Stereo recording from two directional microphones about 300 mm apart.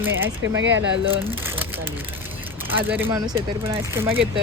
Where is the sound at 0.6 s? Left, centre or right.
Right.